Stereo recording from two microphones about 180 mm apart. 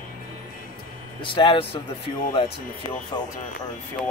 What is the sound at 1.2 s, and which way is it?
Speech, 30° left (ahead or behind).